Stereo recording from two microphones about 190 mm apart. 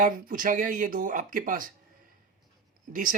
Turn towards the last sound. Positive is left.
turn(degrees=-45)  # may be behind; listen again after turning